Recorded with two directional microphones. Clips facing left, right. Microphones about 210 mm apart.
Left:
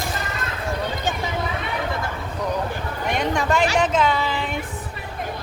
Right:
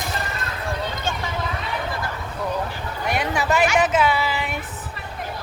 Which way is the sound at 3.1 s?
5° right (ahead or behind).